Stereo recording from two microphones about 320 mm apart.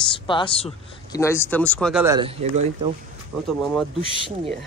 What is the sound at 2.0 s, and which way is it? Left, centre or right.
Speech, centre.